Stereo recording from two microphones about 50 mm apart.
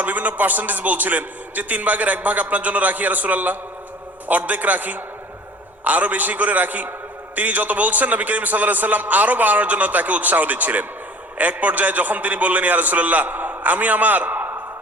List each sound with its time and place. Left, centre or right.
0.0 s a man's voice: right